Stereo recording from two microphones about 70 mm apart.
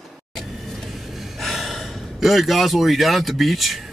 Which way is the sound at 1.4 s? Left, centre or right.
Centre.